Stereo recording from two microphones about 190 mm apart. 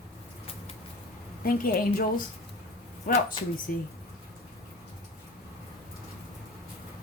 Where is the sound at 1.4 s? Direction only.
50° left (ahead or behind).